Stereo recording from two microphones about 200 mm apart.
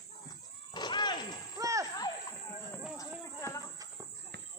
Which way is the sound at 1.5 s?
15° right (ahead or behind).